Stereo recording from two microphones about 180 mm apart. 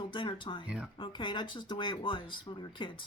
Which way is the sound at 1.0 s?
25° left (ahead or behind).